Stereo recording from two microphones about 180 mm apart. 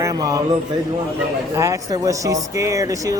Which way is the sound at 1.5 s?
15° right (ahead or behind).